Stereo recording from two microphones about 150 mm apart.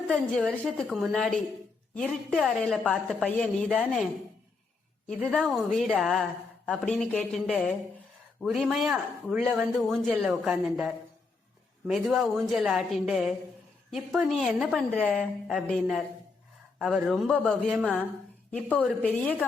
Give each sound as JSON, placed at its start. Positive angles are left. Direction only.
{"t": 0.1, "sound": "a woman's voice", "side_deg": 5}
{"t": 5.0, "sound": "a woman's voice", "side_deg": 5}